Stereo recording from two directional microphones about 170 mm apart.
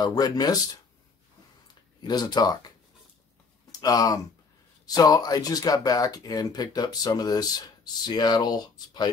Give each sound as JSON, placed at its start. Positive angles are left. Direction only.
{"t": 0.0, "sound": "speech", "side_deg": 25}
{"t": 2.0, "sound": "speech", "side_deg": 25}
{"t": 3.8, "sound": "speech", "side_deg": 20}